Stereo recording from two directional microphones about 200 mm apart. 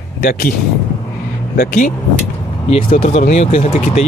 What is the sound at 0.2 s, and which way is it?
Speech, 50° left (ahead or behind).